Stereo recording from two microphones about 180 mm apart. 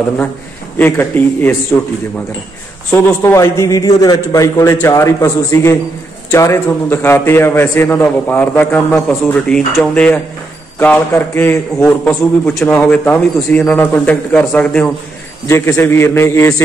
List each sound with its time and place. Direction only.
0.7 s a man's voice: 10° left (ahead or behind)
2.9 s a man's voice: 15° left (ahead or behind)